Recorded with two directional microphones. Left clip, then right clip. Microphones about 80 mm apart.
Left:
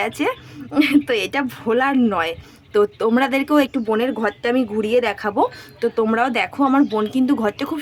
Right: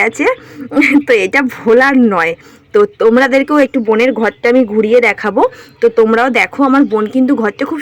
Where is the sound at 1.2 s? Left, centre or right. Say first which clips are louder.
Right 10 dB; right.